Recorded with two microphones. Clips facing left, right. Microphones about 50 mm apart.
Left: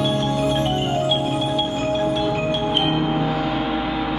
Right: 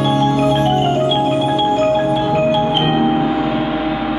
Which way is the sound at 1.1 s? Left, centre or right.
Right.